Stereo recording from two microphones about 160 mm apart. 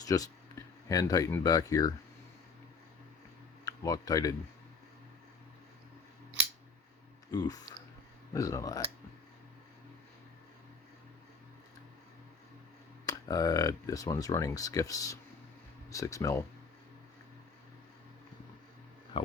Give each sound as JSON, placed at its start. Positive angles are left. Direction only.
{"t": 0.0, "sound": "speech", "side_deg": 20}
{"t": 3.7, "sound": "speech", "side_deg": 20}
{"t": 7.3, "sound": "speech", "side_deg": 25}
{"t": 13.1, "sound": "speech", "side_deg": 25}
{"t": 19.1, "sound": "speech", "side_deg": 35}